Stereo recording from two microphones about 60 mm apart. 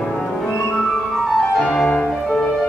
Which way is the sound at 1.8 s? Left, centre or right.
Centre.